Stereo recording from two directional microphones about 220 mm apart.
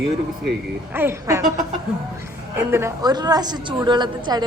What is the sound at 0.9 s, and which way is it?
Speech, 10° right (ahead or behind).